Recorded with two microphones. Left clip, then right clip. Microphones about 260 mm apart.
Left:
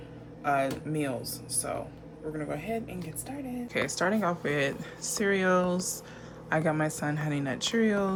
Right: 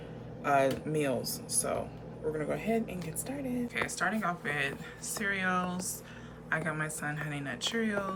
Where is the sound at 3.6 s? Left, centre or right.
Centre.